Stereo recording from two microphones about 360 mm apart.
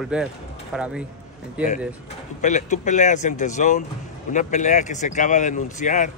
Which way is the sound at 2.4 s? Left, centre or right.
Centre.